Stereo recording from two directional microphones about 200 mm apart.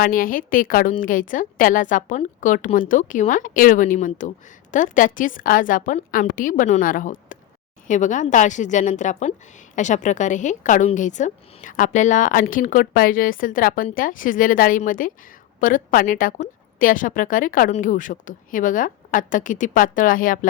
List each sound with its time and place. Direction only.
0.0 s a woman's voice: 45° left (ahead or behind)